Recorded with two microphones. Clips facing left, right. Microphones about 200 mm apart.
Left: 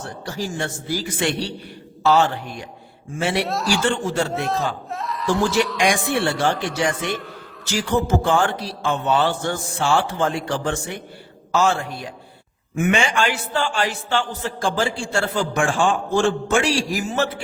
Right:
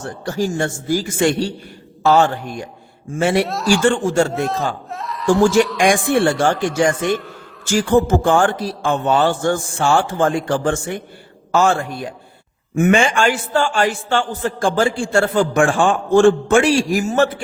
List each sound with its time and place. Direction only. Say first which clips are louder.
0.0 s a man's voice: right 7 dB; 50° right (ahead or behind)
3.4 s speech: right 5 dB; centre (ahead or behind)
3.8 s a man's voice: right 8 dB; 50° right (ahead or behind)
4.3 s a man's voice: right 3 dB; centre (ahead or behind)
6.1 s a man's voice: right 5 dB; 50° right (ahead or behind)